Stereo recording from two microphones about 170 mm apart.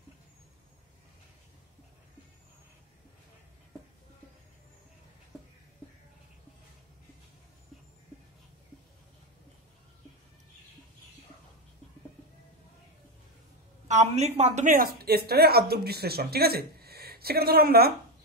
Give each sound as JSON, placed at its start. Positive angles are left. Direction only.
{"t": 13.8, "sound": "speech", "side_deg": -40}